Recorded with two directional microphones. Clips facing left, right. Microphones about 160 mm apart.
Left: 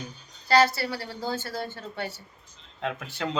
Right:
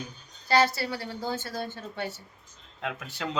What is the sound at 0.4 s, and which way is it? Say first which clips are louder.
A woman's voice: left 2 dB; 20° right (ahead or behind).